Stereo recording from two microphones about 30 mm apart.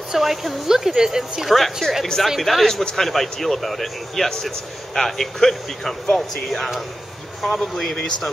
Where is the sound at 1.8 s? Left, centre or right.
Left.